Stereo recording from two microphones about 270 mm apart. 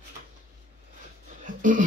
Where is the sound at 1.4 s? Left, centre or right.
Right.